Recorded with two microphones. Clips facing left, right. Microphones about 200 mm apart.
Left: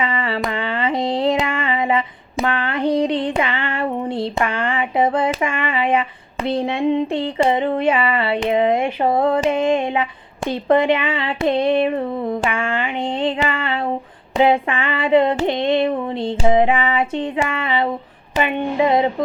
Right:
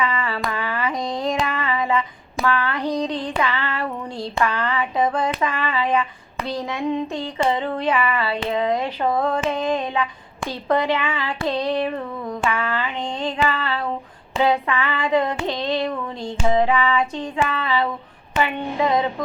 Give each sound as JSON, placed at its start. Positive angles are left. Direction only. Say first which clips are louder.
{"t": 0.0, "sound": "a sound", "louder": "left 2 dB", "side_deg": 25}
{"t": 3.1, "sound": "child singing", "louder": "left 6 dB", "side_deg": 65}
{"t": 3.3, "sound": "female singing", "louder": "left 2 dB", "side_deg": 25}